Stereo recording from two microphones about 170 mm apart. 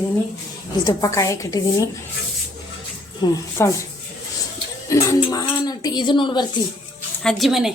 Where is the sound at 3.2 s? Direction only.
20° left (ahead or behind).